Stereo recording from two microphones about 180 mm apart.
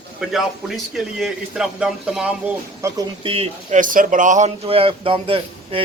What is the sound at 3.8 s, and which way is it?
A man's voice, 50° right (ahead or behind).